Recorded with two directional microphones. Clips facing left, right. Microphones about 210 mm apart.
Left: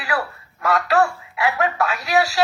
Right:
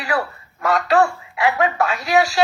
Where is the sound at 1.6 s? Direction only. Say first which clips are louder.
Right 2 dB; 20° right (ahead or behind).